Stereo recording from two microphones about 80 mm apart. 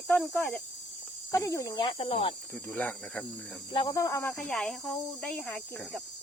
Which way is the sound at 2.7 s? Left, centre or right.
Left.